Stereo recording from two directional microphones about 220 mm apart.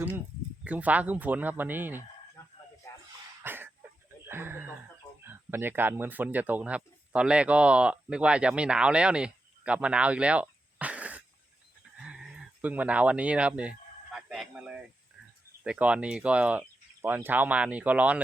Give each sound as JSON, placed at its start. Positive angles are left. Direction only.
{"t": 0.6, "sound": "speech", "side_deg": -5}
{"t": 3.4, "sound": "cough", "side_deg": -10}
{"t": 4.3, "sound": "a sound", "side_deg": -10}
{"t": 5.2, "sound": "speech", "side_deg": -10}
{"t": 12.0, "sound": "a sound", "side_deg": -5}
{"t": 15.6, "sound": "speech", "side_deg": -5}